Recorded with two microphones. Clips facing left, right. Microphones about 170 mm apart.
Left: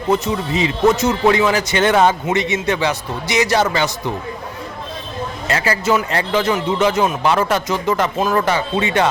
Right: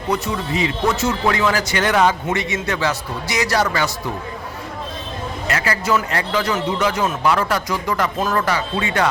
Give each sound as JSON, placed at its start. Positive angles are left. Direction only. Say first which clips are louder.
{"t": 0.1, "sound": "speech", "louder": "left 4 dB", "side_deg": 20}
{"t": 5.5, "sound": "speech", "louder": "left 3 dB", "side_deg": 25}